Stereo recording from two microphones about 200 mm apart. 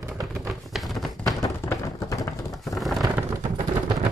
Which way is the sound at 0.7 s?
Centre (ahead or behind).